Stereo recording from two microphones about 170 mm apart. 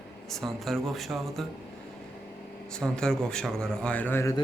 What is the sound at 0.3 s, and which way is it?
A man's voice, centre (ahead or behind).